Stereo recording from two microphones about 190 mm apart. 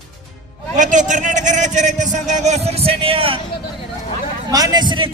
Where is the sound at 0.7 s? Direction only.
40° right (ahead or behind).